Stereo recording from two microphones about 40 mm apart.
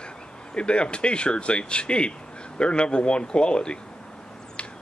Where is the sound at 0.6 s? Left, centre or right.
Left.